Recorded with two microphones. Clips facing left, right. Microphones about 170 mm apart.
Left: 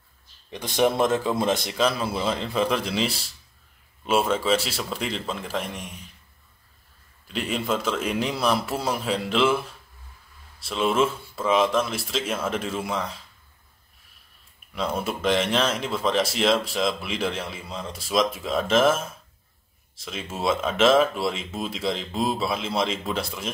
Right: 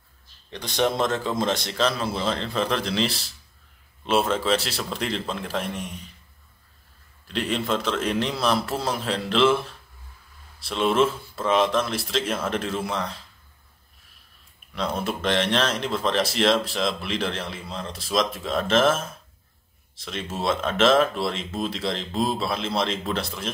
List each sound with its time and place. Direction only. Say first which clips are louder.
0.5 s speech: left 2 dB; 5° left (ahead or behind)
7.2 s speech: right 1 dB; 5° left (ahead or behind)
14.7 s speech: even; 5° left (ahead or behind)
20.1 s speech: even; 5° left (ahead or behind)